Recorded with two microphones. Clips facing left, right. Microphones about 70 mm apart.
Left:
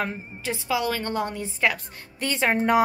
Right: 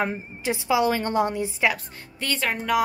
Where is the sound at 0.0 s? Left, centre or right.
Centre.